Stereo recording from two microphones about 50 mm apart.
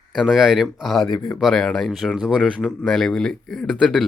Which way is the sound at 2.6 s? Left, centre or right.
Centre.